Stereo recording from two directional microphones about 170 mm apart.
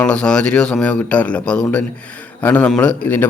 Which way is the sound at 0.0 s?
5° left (ahead or behind).